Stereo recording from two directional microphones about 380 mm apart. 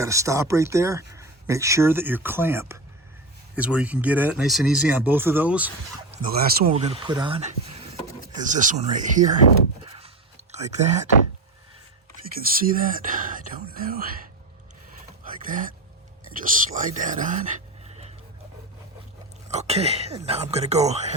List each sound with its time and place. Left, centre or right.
0.0 s speech: centre
6.3 s speech: right
10.5 s speech: centre
12.5 s speech: right
15.4 s speech: right
19.5 s speech: centre